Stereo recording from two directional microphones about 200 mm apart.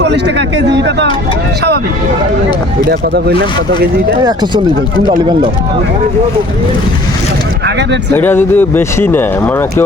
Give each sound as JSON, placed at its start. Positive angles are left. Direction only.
{"t": 0.0, "sound": "speech", "side_deg": -60}
{"t": 2.9, "sound": "speech", "side_deg": -55}
{"t": 4.2, "sound": "speech", "side_deg": -20}
{"t": 8.1, "sound": "speech", "side_deg": 10}